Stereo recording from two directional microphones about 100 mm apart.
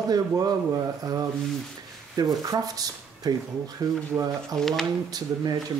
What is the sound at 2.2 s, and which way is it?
Speech, 40° right (ahead or behind).